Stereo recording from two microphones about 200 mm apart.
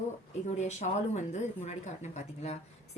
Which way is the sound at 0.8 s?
35° left (ahead or behind).